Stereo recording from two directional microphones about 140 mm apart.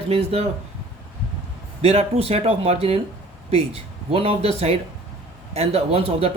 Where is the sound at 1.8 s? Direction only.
45° right (ahead or behind).